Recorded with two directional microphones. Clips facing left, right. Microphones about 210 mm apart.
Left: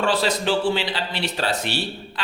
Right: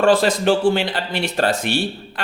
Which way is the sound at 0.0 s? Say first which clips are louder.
Right 6 dB; 50° right (ahead or behind).